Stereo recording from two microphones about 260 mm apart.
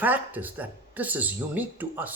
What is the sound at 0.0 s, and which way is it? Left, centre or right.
Speech, centre.